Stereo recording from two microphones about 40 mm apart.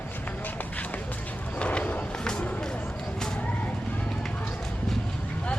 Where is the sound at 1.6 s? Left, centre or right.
Left.